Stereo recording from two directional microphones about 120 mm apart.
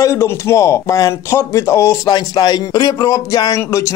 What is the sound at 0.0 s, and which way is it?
Speech, 25° left (ahead or behind).